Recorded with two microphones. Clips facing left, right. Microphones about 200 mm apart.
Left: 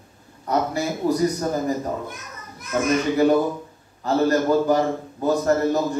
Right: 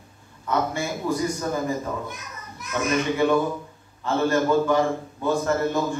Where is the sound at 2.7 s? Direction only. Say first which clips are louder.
Left 4 dB; 40° left (ahead or behind).